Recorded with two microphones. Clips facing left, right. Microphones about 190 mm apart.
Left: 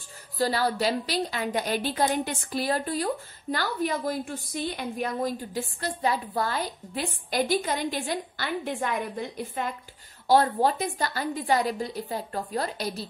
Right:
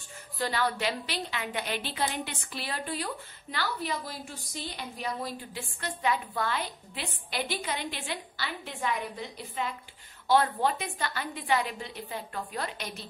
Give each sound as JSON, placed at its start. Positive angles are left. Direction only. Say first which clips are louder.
{"t": 0.4, "sound": "a woman's voice", "louder": "left 5 dB", "side_deg": 35}
{"t": 10.2, "sound": "a woman's voice", "louder": "left 4 dB", "side_deg": 40}